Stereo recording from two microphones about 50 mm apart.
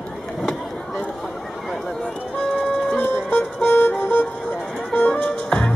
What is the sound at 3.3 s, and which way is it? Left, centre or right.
Music, left.